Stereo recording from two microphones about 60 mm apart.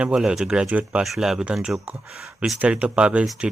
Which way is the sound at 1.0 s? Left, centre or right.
Centre.